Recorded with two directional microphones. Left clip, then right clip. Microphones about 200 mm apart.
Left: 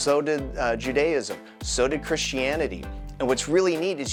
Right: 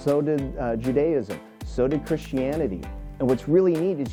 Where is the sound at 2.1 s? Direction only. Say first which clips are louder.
Left 1 dB; 20° left (ahead or behind).